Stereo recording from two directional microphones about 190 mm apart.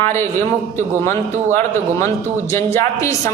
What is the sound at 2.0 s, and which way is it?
A woman's voice, 15° left (ahead or behind).